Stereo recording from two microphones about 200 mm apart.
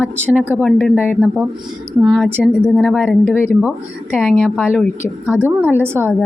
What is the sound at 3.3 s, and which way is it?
A woman's voice, 10° left (ahead or behind).